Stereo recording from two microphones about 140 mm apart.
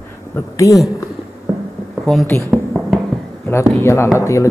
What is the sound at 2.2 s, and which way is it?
Speech, 15° left (ahead or behind).